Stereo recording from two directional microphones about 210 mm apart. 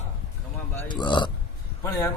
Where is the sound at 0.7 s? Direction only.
20° left (ahead or behind).